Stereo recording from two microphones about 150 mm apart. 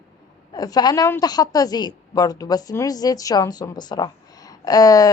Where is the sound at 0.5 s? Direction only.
25° left (ahead or behind).